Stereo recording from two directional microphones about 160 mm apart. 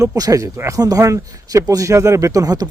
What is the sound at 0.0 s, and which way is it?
Speech, 20° right (ahead or behind).